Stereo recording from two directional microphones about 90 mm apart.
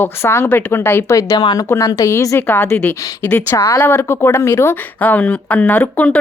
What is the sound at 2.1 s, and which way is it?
Speech, 30° left (ahead or behind).